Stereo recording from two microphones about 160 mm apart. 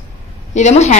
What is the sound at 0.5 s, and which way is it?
Speech, 45° left (ahead or behind).